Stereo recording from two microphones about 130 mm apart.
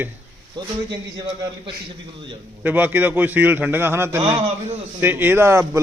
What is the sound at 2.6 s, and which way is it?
A man's voice, 15° right (ahead or behind).